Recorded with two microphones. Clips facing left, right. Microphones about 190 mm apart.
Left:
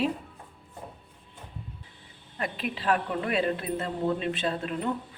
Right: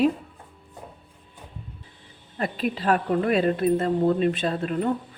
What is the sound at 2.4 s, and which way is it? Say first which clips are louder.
Speech: right 6 dB; 40° right (ahead or behind).